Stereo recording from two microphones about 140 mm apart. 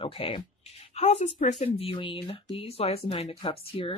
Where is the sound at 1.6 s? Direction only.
45° left (ahead or behind).